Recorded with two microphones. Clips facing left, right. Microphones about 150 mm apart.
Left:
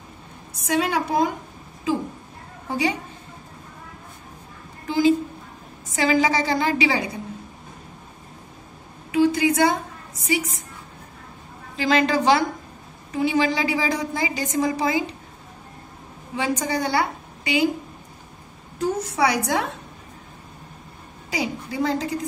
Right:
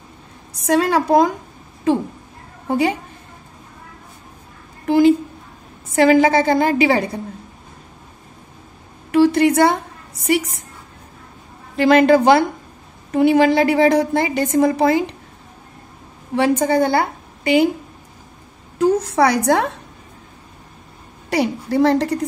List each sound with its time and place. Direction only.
0.6 s a woman's voice: 75° right (ahead or behind)
2.7 s a woman's voice: 55° right (ahead or behind)
4.8 s a woman's voice: 60° right (ahead or behind)
9.1 s a woman's voice: 70° right (ahead or behind)
11.7 s a woman's voice: 60° right (ahead or behind)
16.3 s a woman's voice: 55° right (ahead or behind)
18.8 s a woman's voice: 90° right
21.3 s a woman's voice: 70° right (ahead or behind)